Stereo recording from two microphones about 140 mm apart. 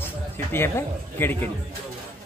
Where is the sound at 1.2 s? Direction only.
15° left (ahead or behind).